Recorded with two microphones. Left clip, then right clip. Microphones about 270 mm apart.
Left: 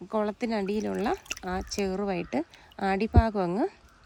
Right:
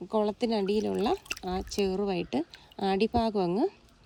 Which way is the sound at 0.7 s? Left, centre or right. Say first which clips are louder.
Right 1 dB; left.